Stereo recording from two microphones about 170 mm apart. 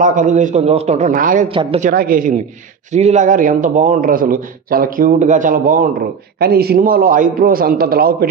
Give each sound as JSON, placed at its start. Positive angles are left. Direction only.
{"t": 0.0, "sound": "a man's voice", "side_deg": -50}
{"t": 1.5, "sound": "a woman's voice", "side_deg": -30}
{"t": 1.8, "sound": "a man's voice", "side_deg": -55}
{"t": 2.9, "sound": "a man's voice", "side_deg": -40}